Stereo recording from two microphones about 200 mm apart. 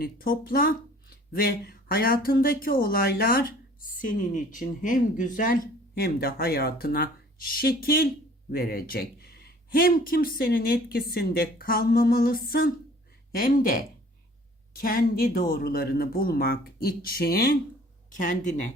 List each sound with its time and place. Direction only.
0.0 s speech: 45° left (ahead or behind)